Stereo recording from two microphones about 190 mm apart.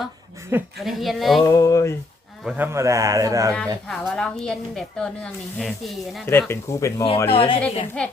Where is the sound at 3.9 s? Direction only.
Centre (ahead or behind).